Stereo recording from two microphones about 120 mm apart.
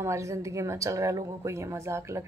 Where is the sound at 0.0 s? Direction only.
25° right (ahead or behind).